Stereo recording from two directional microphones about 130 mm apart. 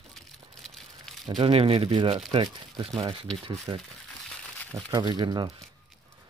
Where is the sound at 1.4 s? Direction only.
45° right (ahead or behind).